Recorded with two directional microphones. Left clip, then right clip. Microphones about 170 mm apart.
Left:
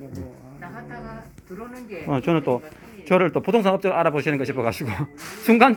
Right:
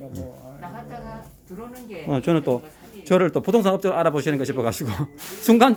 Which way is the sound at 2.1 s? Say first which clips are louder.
Even; 20° right (ahead or behind).